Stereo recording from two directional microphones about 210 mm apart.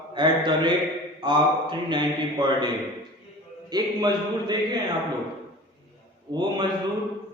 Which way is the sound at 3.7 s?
20° right (ahead or behind).